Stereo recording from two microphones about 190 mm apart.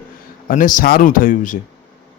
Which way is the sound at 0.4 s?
45° left (ahead or behind).